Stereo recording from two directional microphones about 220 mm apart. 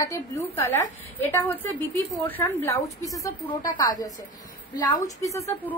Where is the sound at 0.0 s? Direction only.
15° left (ahead or behind).